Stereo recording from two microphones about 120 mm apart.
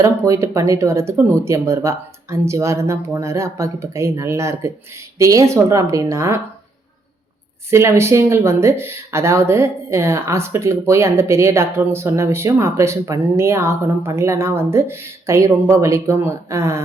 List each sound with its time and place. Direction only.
0.0 s speech: 25° right (ahead or behind)
7.7 s speech: 25° right (ahead or behind)